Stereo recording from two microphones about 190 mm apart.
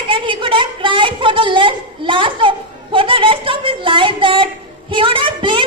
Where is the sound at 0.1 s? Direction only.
25° right (ahead or behind).